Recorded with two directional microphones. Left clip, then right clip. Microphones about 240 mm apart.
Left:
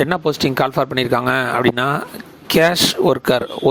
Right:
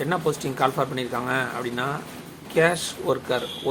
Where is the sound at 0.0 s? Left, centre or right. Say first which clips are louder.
Left 8 dB; left.